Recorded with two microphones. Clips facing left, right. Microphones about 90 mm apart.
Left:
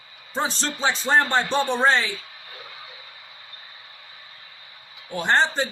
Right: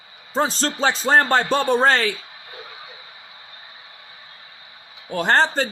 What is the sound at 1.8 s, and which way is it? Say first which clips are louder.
Speech: right 2 dB; 55° right (ahead or behind).